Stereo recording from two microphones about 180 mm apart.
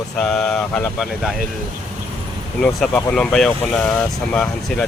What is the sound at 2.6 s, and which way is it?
Speech, 5° left (ahead or behind).